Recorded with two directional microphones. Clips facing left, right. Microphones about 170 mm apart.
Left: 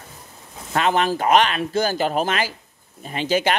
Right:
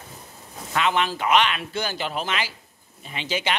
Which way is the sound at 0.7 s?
45° left (ahead or behind).